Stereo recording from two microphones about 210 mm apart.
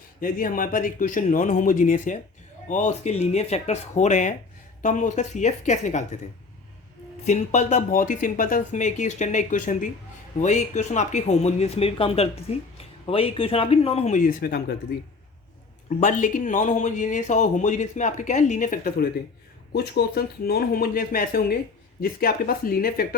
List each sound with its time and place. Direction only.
0.2 s speech: 40° left (ahead or behind)
7.3 s speech: 35° left (ahead or behind)
16.0 s speech: 40° left (ahead or behind)